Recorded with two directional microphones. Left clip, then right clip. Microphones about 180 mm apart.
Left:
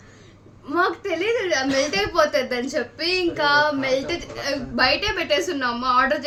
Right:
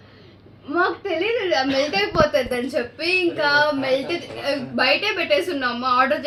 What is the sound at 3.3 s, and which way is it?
A woman's voice, 15° left (ahead or behind).